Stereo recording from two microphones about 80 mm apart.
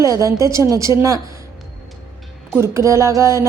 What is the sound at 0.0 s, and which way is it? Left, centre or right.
A woman's voice, right.